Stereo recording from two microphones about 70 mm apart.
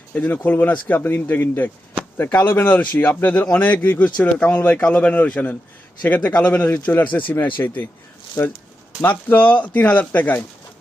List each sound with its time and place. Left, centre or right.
0.1 s speech: left
8.4 s speech: left
9.0 s speech: left